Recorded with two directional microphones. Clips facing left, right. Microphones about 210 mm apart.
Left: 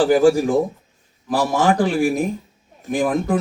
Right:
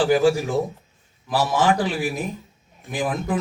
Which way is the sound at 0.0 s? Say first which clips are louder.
Left 4 dB; 45° left (ahead or behind).